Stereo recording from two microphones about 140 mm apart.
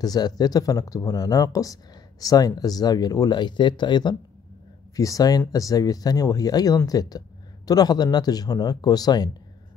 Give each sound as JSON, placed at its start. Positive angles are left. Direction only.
{"t": 0.0, "sound": "speech", "side_deg": 30}